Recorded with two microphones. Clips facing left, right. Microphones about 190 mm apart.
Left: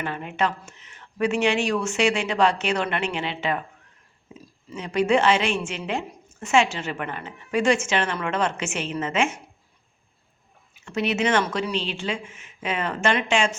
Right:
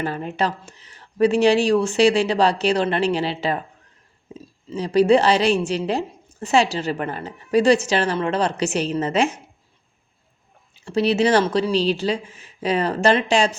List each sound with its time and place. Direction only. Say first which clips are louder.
0.0 s a woman's voice: right 3 dB; 35° right (ahead or behind)
10.8 s a woman's voice: right 6 dB; 35° right (ahead or behind)